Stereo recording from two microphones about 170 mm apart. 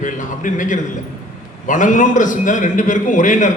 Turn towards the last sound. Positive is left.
turn(degrees=50)  # may be behind; listen again after turning